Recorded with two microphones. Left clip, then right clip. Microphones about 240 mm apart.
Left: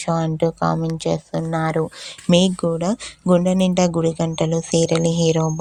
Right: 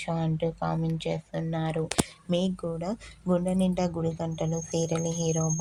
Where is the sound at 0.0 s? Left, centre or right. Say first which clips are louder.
Left 10 dB; left.